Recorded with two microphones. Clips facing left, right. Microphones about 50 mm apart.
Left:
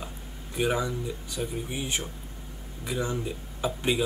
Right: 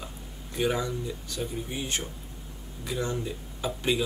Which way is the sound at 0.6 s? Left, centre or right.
Centre.